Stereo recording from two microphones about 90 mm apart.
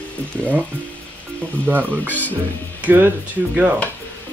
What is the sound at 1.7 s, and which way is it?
Speech, 20° right (ahead or behind).